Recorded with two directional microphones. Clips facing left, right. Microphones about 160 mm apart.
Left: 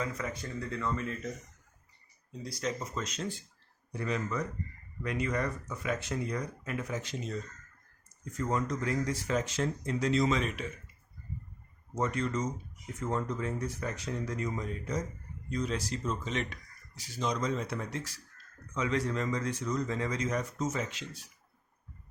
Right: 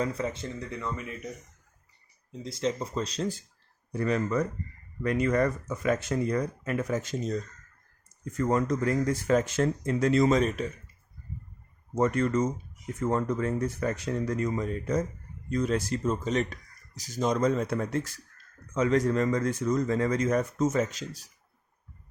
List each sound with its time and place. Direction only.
0.0 s speech: 30° right (ahead or behind)
2.4 s speech: 25° right (ahead or behind)
3.9 s speech: 50° right (ahead or behind)
8.4 s speech: 55° right (ahead or behind)
11.9 s speech: 55° right (ahead or behind)